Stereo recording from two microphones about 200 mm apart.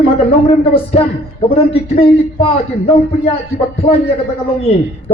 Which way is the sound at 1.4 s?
30° left (ahead or behind).